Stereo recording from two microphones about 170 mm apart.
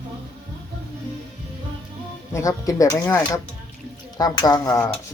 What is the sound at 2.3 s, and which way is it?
Speech, 20° left (ahead or behind).